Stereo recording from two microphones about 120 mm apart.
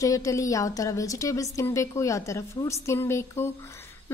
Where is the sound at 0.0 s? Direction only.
25° left (ahead or behind).